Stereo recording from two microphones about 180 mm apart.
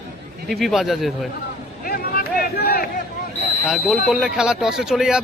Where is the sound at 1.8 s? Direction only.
55° left (ahead or behind).